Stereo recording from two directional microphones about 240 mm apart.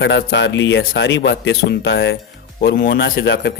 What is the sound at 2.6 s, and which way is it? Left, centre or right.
Speech, left.